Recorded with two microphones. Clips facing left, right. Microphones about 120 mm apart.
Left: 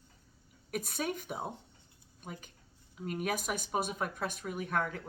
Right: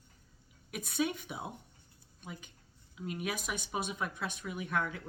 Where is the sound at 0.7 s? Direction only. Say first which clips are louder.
Right 1 dB; 45° left (ahead or behind).